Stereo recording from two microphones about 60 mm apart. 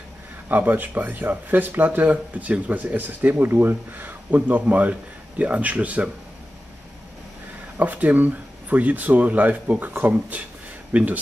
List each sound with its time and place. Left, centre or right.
0.5 s speech: right
7.7 s speech: right